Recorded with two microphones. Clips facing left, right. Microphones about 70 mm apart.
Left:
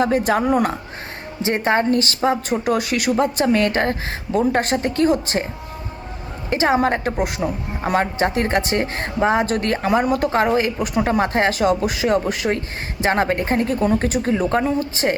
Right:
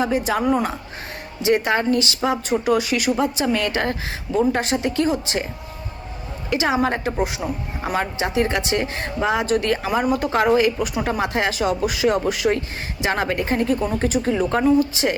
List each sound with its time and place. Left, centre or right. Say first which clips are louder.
0.0 s speech: left 3 dB; left
1.4 s speech: even; left
6.5 s speech: left 3 dB; left